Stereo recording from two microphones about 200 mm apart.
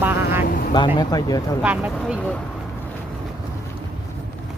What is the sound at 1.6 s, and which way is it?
Speech, 5° right (ahead or behind).